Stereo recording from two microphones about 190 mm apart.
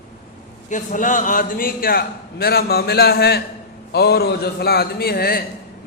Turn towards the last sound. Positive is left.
turn(degrees=55)  # may be behind; listen again after turning